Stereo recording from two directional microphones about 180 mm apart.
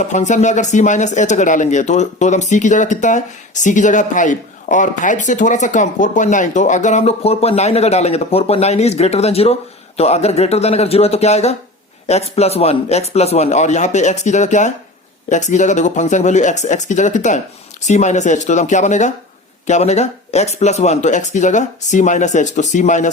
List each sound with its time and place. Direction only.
0.0 s speech: 40° left (ahead or behind)